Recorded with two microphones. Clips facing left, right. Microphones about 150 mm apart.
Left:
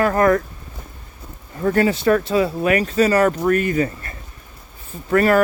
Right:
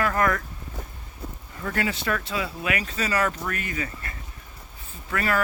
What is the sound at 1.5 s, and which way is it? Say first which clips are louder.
Speech: left 11 dB; 40° left (ahead or behind).